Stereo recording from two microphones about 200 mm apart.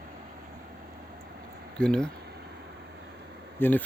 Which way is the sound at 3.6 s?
10° left (ahead or behind).